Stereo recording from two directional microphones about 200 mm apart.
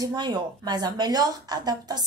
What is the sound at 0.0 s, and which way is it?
A woman's voice, 20° right (ahead or behind).